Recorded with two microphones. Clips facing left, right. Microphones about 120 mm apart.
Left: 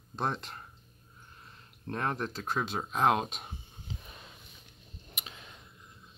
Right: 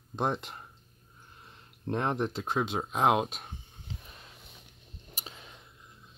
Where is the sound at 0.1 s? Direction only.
15° right (ahead or behind).